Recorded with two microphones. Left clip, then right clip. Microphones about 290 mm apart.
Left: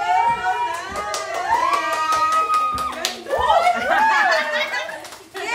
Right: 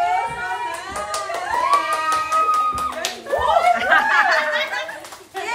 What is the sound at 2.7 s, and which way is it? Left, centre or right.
Slap, centre.